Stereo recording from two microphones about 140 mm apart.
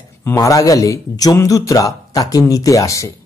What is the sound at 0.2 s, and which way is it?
Speech, 20° left (ahead or behind).